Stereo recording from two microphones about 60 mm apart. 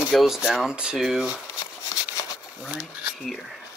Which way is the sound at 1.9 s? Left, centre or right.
Left.